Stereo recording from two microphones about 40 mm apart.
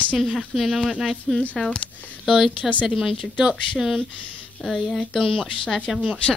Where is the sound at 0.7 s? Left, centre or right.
Centre.